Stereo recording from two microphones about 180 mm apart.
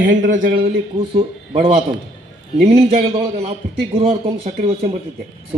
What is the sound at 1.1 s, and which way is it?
Speech, 30° right (ahead or behind).